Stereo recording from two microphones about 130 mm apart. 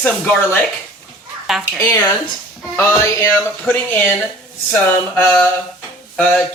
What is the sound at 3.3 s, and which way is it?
Speech, 10° left (ahead or behind).